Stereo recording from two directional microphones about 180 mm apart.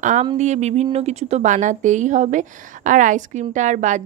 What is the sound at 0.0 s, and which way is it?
Speech, 45° right (ahead or behind).